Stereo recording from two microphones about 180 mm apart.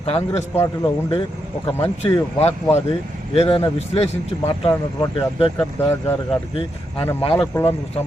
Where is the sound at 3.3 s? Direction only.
30° left (ahead or behind).